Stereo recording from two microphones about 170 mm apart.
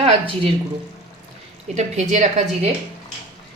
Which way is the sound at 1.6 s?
45° right (ahead or behind).